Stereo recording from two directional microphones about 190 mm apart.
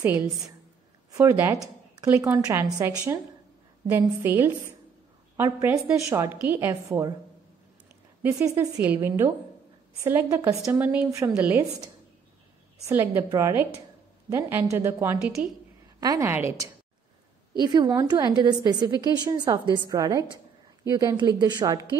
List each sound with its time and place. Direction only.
1.1 s a woman's voice: 15° right (ahead or behind)
3.9 s a woman's voice: 15° right (ahead or behind)
8.2 s a woman's voice: 10° right (ahead or behind)
12.8 s a woman's voice: 10° right (ahead or behind)
16.0 s a woman's voice: 20° right (ahead or behind)
17.6 s a woman's voice: 20° right (ahead or behind)